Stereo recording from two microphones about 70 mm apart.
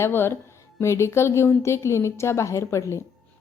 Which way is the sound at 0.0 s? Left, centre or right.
Left.